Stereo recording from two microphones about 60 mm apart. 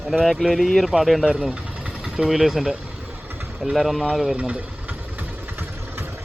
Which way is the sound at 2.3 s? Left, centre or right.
Centre.